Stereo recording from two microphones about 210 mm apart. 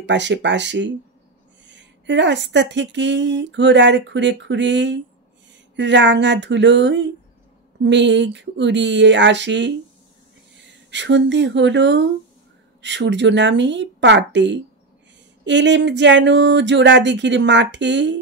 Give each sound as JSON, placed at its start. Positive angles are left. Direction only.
{"t": 0.0, "sound": "speech", "side_deg": -55}
{"t": 10.9, "sound": "speech", "side_deg": -55}